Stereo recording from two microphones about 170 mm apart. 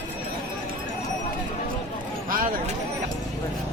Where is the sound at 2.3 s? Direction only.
55° right (ahead or behind).